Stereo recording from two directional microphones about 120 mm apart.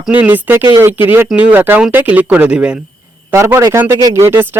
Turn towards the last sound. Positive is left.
turn(degrees=-20)  # may be behind; listen again after turning